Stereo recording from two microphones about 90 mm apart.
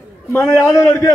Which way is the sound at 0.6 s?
40° left (ahead or behind).